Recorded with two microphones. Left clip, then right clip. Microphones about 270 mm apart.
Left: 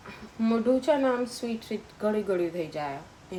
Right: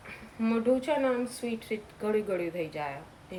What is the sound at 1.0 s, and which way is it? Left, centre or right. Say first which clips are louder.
Speech: left 2 dB; centre.